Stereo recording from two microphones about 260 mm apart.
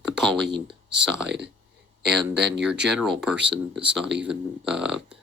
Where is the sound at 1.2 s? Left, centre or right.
Right.